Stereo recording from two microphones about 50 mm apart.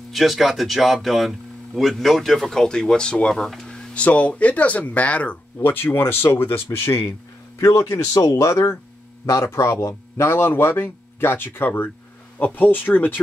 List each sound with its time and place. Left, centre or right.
0.1 s speech: centre
3.4 s a sound: centre
3.9 s speech: left
5.6 s speech: left
7.7 s speech: left
9.2 s speech: left